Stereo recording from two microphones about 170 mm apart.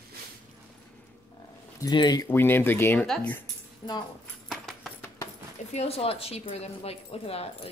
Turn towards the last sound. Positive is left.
turn(degrees=35)  # may be behind; listen again after turning